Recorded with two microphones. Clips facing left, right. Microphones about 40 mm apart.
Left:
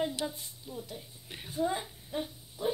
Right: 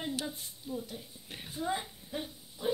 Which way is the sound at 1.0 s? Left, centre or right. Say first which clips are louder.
Even; centre.